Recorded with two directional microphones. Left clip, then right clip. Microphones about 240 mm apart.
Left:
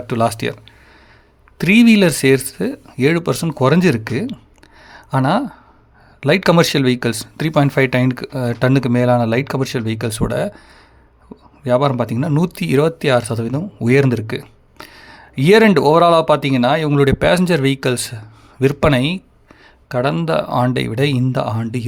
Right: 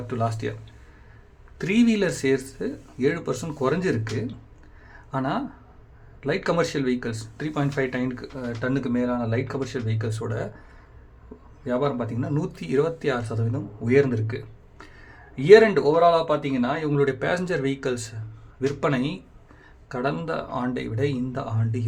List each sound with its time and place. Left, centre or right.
0.1 s speech: left
1.5 s speech: left
4.9 s a sound: left
6.1 s speech: left
11.6 s speech: left